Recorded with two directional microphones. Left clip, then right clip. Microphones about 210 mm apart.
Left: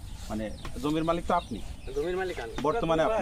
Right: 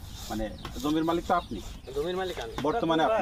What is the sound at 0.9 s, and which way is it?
Speech, 35° left (ahead or behind).